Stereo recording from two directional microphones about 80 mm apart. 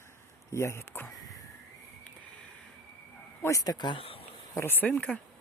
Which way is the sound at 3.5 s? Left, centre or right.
Left.